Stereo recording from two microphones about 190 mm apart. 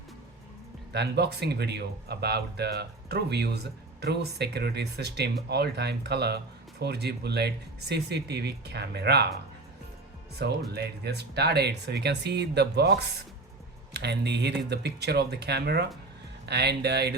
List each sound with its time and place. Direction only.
0.9 s speech: 60° right (ahead or behind)
10.3 s speech: 60° right (ahead or behind)